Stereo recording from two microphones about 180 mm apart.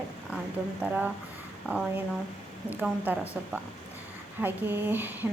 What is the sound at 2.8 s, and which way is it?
A woman's voice, 10° right (ahead or behind).